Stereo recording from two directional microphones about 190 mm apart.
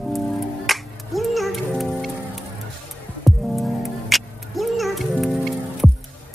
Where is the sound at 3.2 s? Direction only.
Centre (ahead or behind).